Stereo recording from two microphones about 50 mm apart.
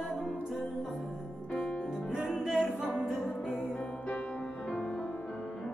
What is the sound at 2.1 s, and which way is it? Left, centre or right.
Music, centre.